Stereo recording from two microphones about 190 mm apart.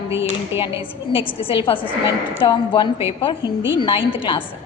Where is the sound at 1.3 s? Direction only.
30° left (ahead or behind).